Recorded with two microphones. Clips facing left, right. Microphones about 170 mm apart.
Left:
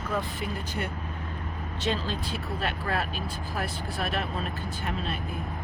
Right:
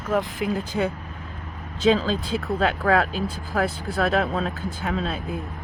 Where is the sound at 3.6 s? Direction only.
90° right.